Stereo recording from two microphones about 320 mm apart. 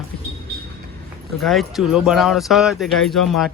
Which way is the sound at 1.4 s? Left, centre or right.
Centre.